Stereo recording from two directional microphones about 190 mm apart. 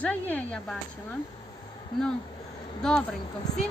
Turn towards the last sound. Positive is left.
turn(degrees=20)  # may be behind; listen again after turning